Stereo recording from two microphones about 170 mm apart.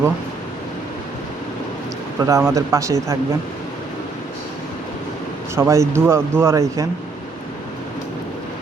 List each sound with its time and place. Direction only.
2.2 s speech: 20° right (ahead or behind)
5.5 s speech: 15° right (ahead or behind)